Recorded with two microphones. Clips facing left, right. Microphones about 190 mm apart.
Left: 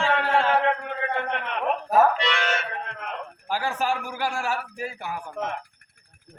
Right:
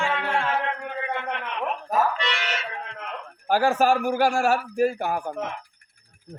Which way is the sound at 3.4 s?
45° right (ahead or behind).